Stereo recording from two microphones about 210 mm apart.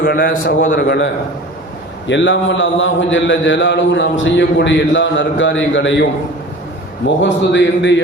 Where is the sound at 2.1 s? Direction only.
60° left (ahead or behind).